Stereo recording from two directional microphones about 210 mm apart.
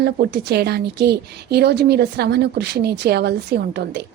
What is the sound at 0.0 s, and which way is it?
A woman's voice, 50° right (ahead or behind).